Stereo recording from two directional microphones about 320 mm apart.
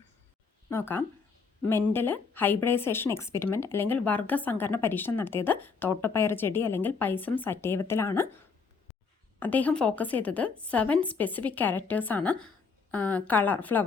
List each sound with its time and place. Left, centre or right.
0.7 s a woman's voice: centre
9.4 s a woman's voice: centre